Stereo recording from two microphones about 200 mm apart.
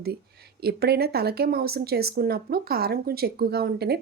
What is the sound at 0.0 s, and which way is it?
Speech, 50° right (ahead or behind).